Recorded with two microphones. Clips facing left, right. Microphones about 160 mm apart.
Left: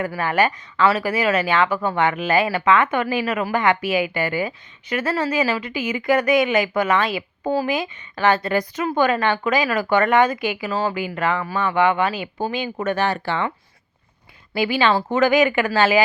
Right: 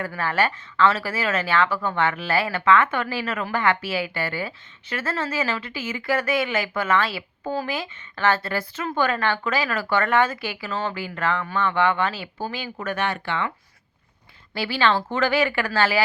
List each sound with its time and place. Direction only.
0.0 s speech: 15° left (ahead or behind); by 13.5 s 35° left (ahead or behind)
14.5 s speech: 15° left (ahead or behind)